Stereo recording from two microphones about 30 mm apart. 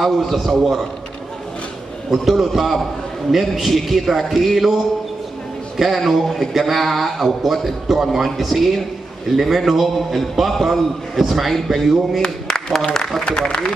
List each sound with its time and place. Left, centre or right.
0.0 s a man's voice: centre
2.0 s a man's voice: centre
5.9 s a man's voice: centre
12.2 s a sound: left